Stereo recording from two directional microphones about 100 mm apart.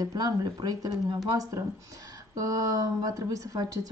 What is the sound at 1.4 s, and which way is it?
A woman's voice, 30° right (ahead or behind).